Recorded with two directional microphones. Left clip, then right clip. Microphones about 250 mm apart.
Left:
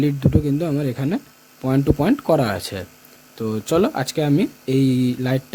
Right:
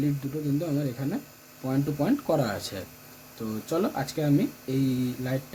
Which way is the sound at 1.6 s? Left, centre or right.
Left.